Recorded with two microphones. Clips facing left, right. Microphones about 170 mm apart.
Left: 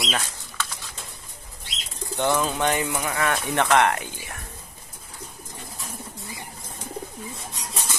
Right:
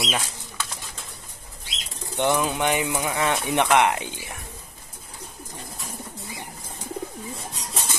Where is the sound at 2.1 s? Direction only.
15° right (ahead or behind).